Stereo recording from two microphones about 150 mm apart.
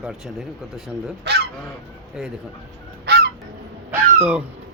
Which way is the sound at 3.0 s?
90° right.